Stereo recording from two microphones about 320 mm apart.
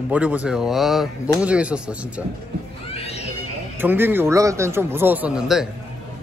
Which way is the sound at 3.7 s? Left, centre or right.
Centre.